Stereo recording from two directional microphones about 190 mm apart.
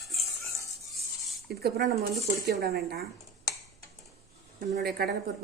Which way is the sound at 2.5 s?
60° right (ahead or behind).